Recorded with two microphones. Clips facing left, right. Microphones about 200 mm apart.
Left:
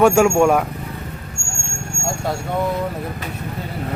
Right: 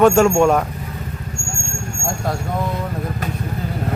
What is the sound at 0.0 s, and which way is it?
Speech, 10° left (ahead or behind).